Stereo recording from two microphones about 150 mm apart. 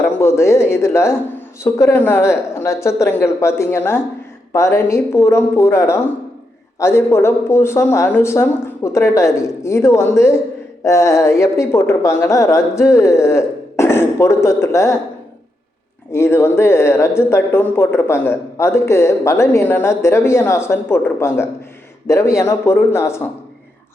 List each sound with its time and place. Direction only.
0.2 s a sound: 20° left (ahead or behind)
0.7 s speech: 20° left (ahead or behind)
16.1 s speech: 15° left (ahead or behind)